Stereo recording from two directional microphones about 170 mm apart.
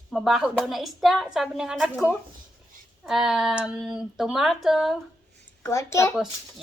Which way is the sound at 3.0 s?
Centre (ahead or behind).